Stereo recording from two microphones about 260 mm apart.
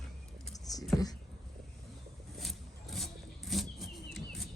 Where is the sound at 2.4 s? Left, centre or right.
Centre.